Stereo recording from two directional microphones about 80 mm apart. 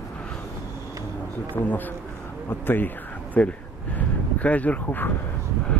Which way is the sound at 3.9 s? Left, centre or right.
Centre.